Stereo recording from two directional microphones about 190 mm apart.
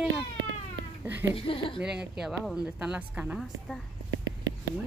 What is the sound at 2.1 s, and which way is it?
A woman's voice, centre (ahead or behind).